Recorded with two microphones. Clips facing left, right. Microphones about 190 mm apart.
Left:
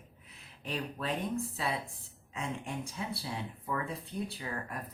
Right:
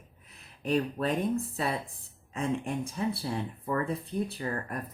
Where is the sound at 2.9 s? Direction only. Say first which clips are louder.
Right 7 dB; 50° right (ahead or behind).